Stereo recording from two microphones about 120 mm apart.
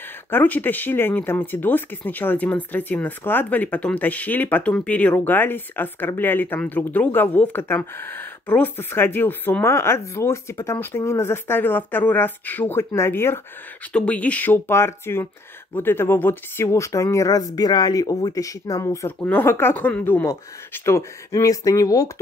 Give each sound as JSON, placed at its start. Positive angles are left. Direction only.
{"t": 0.3, "sound": "speech", "side_deg": 15}
{"t": 19.1, "sound": "speech", "side_deg": 15}